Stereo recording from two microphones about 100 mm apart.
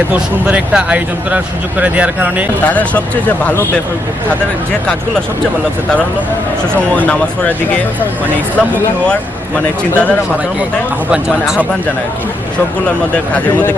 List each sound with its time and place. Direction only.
0.1 s speech: 15° right (ahead or behind)
2.6 s speech: 15° left (ahead or behind)
6.9 s speech: 15° left (ahead or behind)
11.1 s speech: 5° right (ahead or behind)